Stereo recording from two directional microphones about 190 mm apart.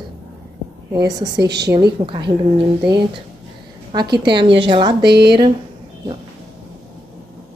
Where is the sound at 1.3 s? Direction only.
60° right (ahead or behind).